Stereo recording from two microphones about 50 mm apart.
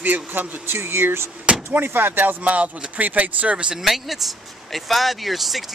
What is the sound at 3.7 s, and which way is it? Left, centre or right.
Speech, centre.